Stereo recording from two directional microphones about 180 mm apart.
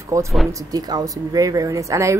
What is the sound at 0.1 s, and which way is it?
A woman's voice, 20° right (ahead or behind).